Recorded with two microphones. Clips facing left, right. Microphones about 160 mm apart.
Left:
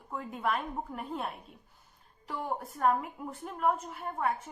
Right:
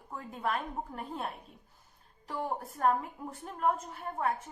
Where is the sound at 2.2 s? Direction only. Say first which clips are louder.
Even; 40° right (ahead or behind).